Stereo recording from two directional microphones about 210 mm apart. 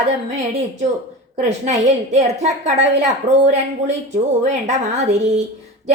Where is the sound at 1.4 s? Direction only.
30° right (ahead or behind).